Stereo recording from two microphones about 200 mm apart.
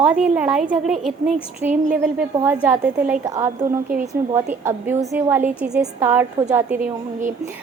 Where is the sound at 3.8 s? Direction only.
45° right (ahead or behind).